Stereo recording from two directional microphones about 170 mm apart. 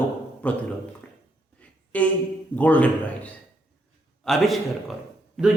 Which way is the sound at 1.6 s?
10° left (ahead or behind).